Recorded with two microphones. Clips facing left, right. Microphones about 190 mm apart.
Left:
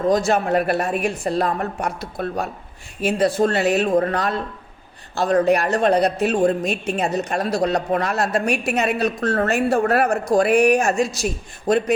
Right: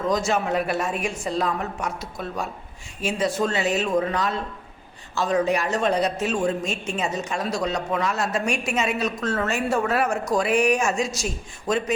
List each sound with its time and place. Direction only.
0.3 s a woman's voice: 60° left (ahead or behind)